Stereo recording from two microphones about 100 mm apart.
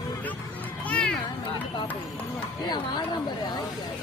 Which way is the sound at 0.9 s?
10° left (ahead or behind).